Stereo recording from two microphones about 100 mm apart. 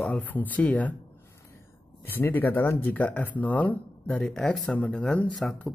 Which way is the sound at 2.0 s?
20° left (ahead or behind).